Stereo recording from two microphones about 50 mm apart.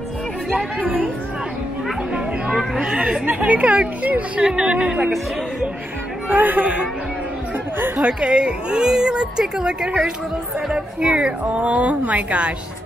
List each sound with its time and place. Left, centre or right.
0.7 s speech: right
2.1 s speech: centre
6.2 s speech: right
8.0 s speech: centre
11.4 s speech: right